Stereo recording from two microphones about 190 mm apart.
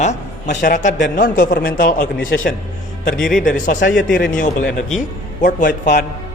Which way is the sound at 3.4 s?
45° left (ahead or behind).